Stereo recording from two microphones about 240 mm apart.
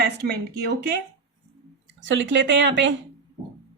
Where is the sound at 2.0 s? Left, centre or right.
Right.